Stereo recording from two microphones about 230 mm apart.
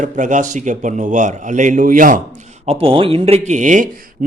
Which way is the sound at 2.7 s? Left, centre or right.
Right.